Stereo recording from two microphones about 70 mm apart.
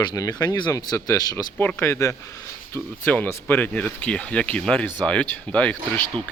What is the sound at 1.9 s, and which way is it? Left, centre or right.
Speech, left.